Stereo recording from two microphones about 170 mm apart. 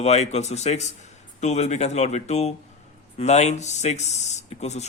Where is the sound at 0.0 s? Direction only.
40° left (ahead or behind).